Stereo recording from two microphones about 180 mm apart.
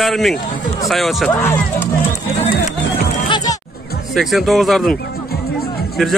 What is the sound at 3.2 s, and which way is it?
Music, 25° left (ahead or behind).